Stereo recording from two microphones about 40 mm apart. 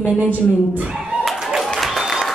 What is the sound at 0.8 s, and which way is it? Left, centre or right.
Speech, right.